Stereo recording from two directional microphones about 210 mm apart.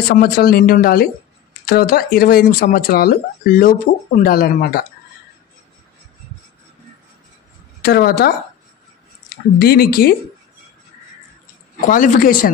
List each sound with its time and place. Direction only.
0.1 s speech: 45° left (ahead or behind)
7.8 s speech: 45° left (ahead or behind)
9.6 s speech: 45° left (ahead or behind)
11.9 s a man's voice: 40° left (ahead or behind)